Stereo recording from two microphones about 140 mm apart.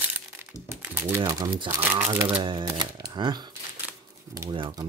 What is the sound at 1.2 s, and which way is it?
Speech, 25° right (ahead or behind).